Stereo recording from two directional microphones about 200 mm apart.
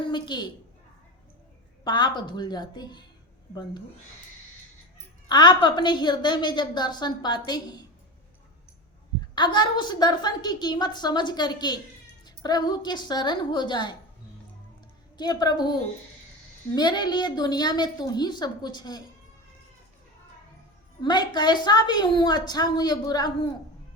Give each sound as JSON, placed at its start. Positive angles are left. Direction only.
{"t": 0.1, "sound": "a woman's voice", "side_deg": 20}
{"t": 1.8, "sound": "a woman's voice", "side_deg": 20}
{"t": 5.3, "sound": "a woman's voice", "side_deg": 20}
{"t": 9.3, "sound": "a woman's voice", "side_deg": 20}
{"t": 15.2, "sound": "a woman's voice", "side_deg": 20}
{"t": 21.0, "sound": "a woman's voice", "side_deg": 20}